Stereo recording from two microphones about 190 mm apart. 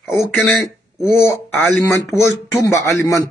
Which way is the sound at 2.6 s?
15° left (ahead or behind).